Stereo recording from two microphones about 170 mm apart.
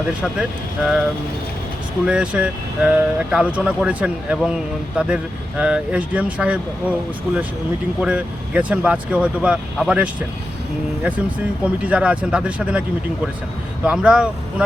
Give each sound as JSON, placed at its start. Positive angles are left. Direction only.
{"t": 0.2, "sound": "speech", "side_deg": -5}
{"t": 2.0, "sound": "speech", "side_deg": -5}
{"t": 8.0, "sound": "speech", "side_deg": -5}
{"t": 13.8, "sound": "speech", "side_deg": -5}